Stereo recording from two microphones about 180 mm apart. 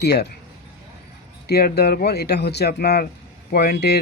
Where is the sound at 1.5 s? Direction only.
60° left (ahead or behind).